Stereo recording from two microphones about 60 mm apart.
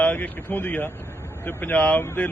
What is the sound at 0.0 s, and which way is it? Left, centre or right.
Speech, left.